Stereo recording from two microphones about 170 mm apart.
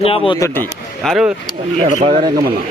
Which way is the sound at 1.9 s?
45° right (ahead or behind).